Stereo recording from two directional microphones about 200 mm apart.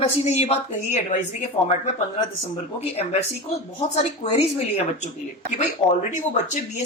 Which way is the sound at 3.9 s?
35° left (ahead or behind).